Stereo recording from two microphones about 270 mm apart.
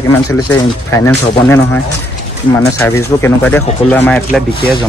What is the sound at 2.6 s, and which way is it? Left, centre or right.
Speech, centre.